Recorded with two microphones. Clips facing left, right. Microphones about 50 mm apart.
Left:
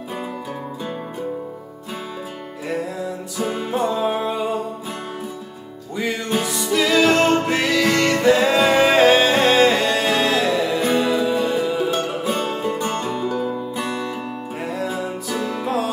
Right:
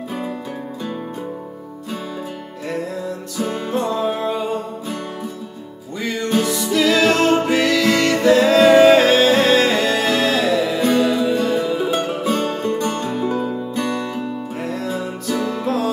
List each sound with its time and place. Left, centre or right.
3.3 s music: centre
5.9 s music: centre
7.4 s music: centre
13.1 s music: right
13.7 s music: centre